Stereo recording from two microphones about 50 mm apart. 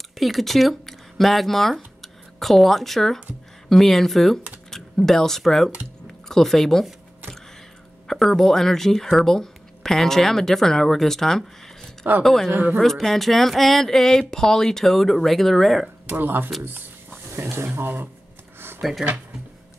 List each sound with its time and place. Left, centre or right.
0.1 s speech: centre
8.1 s speech: centre
16.1 s speech: right
16.6 s a sound: right
17.4 s a sound: right
18.8 s speech: centre